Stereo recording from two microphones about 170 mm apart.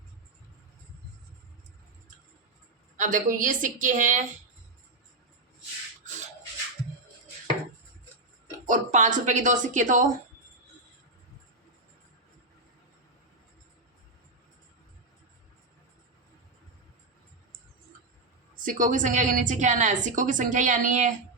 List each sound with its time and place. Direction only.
3.0 s a woman's voice: 50° right (ahead or behind)
8.6 s a woman's voice: 50° right (ahead or behind)
18.6 s a woman's voice: 50° right (ahead or behind)